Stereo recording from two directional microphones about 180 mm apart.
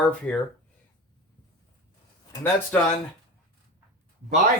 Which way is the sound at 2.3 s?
10° left (ahead or behind).